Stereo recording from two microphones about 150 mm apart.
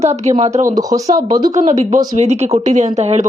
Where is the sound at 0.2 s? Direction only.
50° right (ahead or behind).